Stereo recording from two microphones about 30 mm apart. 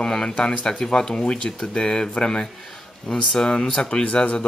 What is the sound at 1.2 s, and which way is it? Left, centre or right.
Speech, left.